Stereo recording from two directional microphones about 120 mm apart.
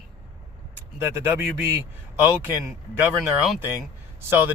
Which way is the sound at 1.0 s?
20° right (ahead or behind).